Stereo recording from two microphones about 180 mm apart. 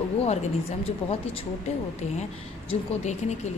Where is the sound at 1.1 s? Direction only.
30° left (ahead or behind).